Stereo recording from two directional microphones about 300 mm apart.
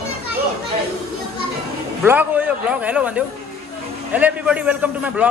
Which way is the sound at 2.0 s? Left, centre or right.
Centre.